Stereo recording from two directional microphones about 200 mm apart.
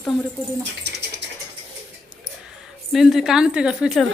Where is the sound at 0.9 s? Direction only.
60° right (ahead or behind).